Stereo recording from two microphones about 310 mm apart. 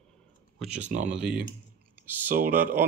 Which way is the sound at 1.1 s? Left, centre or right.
Centre.